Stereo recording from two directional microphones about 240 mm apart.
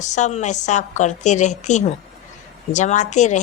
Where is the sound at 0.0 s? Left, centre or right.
Left.